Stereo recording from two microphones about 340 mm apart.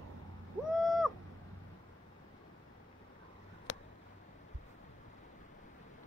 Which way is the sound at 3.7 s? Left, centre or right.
Left.